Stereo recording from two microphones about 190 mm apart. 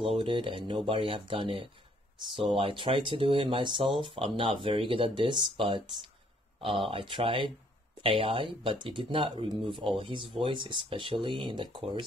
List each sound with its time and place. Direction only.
0.2 s speech: 25° right (ahead or behind)